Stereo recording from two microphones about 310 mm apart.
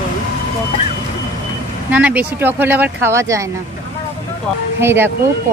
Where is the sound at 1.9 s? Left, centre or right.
Centre.